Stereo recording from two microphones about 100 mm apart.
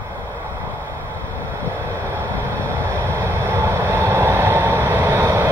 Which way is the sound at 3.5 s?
25° right (ahead or behind).